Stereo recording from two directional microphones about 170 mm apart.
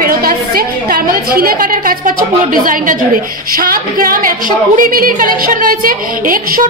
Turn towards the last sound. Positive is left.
turn(degrees=-55)  # may be behind; listen again after turning